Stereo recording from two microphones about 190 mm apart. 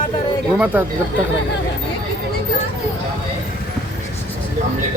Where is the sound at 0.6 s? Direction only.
10° right (ahead or behind).